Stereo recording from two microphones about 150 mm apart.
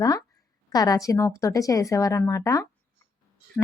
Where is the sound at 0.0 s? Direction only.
25° left (ahead or behind).